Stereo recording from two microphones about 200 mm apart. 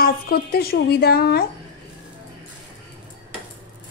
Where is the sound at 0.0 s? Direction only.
50° left (ahead or behind).